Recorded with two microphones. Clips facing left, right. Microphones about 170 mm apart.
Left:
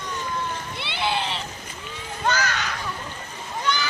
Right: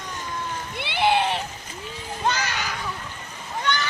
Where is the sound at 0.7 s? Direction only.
55° right (ahead or behind).